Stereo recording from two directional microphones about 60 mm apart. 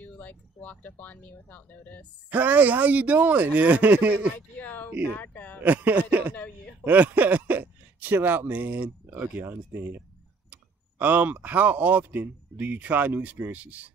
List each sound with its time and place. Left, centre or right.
0.0 s speech: left
2.2 s speech: right
4.4 s speech: left
5.6 s speech: right